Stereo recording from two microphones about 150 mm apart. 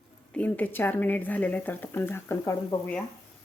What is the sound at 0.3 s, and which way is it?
A woman's voice, 10° left (ahead or behind).